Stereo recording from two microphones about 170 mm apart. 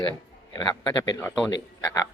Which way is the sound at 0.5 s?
25° left (ahead or behind).